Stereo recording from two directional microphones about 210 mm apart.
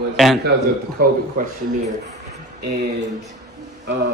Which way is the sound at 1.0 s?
45° right (ahead or behind).